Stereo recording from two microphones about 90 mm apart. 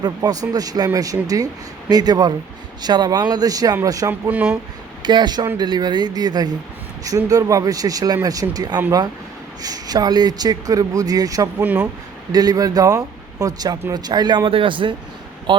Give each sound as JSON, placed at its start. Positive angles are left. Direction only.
{"t": 0.2, "sound": "speech", "side_deg": -45}
{"t": 4.1, "sound": "speech", "side_deg": -15}
{"t": 5.0, "sound": "speech", "side_deg": -55}
{"t": 11.6, "sound": "speech", "side_deg": -20}
{"t": 12.3, "sound": "speech", "side_deg": -45}